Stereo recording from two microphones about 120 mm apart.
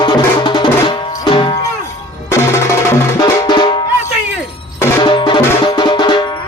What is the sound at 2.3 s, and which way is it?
Music, 25° left (ahead or behind).